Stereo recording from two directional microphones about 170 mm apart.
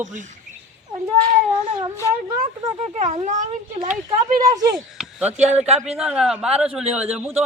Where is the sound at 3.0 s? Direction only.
40° right (ahead or behind).